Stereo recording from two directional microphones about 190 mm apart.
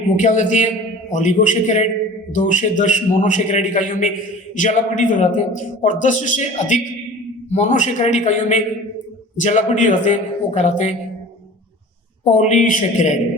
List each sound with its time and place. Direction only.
0.2 s a man's voice: 40° left (ahead or behind)
12.2 s a man's voice: 40° left (ahead or behind)